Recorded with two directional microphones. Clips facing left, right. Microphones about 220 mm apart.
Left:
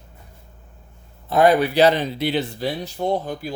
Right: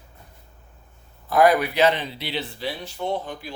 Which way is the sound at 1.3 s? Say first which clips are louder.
Left 2 dB; 25° left (ahead or behind).